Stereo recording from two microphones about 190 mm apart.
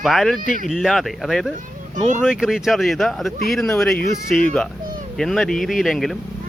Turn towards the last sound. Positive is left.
turn(degrees=0)  # may be behind; listen again after turning